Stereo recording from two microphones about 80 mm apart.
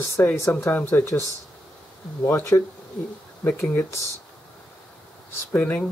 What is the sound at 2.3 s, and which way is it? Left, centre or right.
Speech, left.